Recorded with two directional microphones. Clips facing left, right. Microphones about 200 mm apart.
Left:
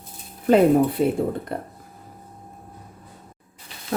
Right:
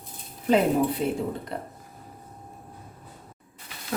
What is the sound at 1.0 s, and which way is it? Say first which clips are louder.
Speech: left 6 dB; 50° left (ahead or behind).